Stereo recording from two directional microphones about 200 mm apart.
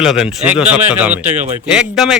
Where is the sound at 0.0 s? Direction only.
Centre (ahead or behind).